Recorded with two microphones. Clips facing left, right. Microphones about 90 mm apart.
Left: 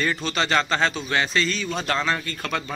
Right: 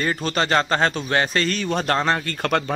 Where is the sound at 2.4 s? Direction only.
65° right (ahead or behind).